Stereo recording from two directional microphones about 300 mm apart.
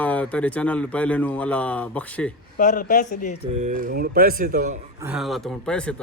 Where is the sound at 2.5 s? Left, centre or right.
Left.